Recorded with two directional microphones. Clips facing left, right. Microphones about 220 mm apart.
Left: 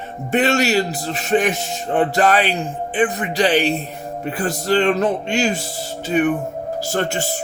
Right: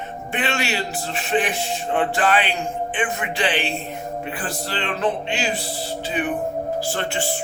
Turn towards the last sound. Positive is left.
turn(degrees=40)  # may be behind; listen again after turning